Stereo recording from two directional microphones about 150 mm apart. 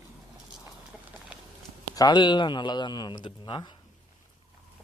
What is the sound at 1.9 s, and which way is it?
Speech, 30° left (ahead or behind).